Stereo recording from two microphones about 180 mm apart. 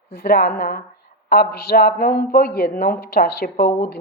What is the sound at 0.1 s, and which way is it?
A woman's voice, 65° left (ahead or behind).